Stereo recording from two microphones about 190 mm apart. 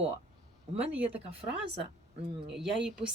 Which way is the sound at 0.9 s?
10° right (ahead or behind).